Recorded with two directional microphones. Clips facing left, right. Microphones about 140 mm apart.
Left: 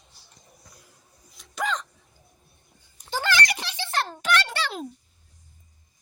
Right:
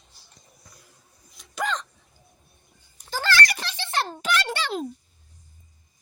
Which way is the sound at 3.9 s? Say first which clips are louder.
Left 1 dB; centre (ahead or behind).